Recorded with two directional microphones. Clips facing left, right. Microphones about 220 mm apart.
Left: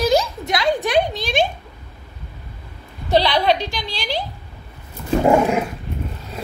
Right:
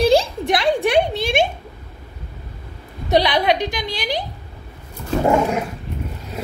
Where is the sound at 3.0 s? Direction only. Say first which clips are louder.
Even; 20° right (ahead or behind).